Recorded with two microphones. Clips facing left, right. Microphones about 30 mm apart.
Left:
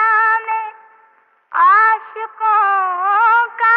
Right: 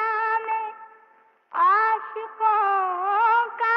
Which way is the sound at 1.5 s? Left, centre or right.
Left.